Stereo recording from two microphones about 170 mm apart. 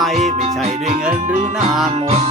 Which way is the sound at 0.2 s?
40° right (ahead or behind).